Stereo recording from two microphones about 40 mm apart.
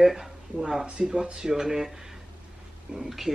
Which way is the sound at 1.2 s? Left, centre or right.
Right.